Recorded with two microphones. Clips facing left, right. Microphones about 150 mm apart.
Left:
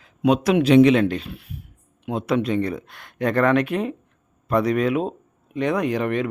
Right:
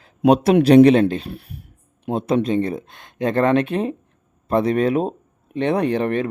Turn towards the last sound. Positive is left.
turn(degrees=-30)  # may be behind; listen again after turning